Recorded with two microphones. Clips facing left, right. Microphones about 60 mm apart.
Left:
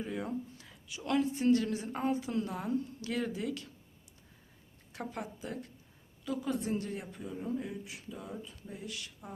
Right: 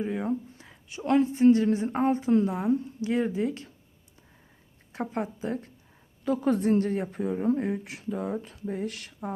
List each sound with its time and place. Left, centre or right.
0.0 s speech: right
4.9 s speech: right
6.2 s speech: right